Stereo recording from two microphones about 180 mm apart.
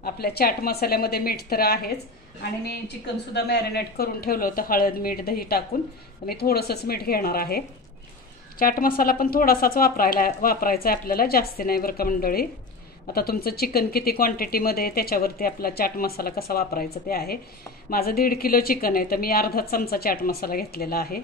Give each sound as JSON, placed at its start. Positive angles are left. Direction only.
{"t": 0.0, "sound": "a woman's voice", "side_deg": 60}
{"t": 3.3, "sound": "a woman's voice", "side_deg": 65}